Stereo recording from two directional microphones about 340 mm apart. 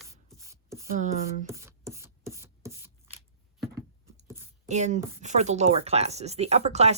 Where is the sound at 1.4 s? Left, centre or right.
Centre.